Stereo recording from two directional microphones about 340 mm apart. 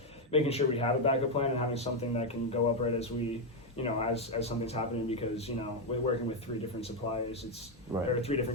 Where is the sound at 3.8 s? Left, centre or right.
Centre.